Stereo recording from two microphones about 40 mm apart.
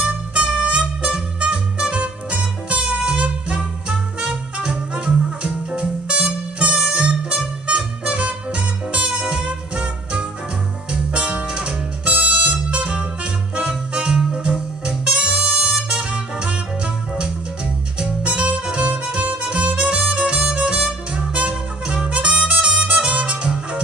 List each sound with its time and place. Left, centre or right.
0.0 s music: right
17.9 s harmonica: right